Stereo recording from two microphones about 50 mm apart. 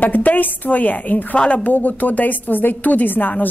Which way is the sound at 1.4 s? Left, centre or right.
Centre.